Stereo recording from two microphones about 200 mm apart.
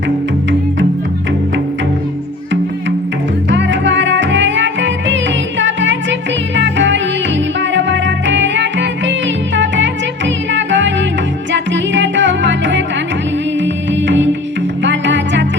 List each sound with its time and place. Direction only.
3.5 s music: 65° right (ahead or behind)